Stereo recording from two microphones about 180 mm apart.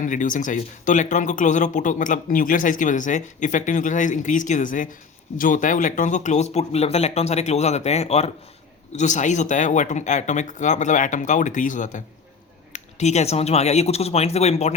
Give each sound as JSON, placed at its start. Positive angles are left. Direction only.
{"t": 0.0, "sound": "speech", "side_deg": 45}